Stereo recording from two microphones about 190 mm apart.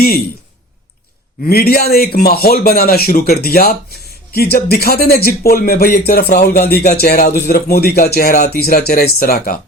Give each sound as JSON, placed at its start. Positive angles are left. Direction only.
{"t": 1.5, "sound": "speech", "side_deg": 55}